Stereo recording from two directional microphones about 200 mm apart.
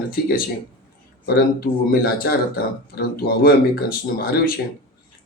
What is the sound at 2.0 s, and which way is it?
Speech, 50° left (ahead or behind).